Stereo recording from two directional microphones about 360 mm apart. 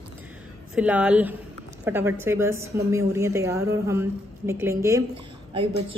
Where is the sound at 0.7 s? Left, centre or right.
Centre.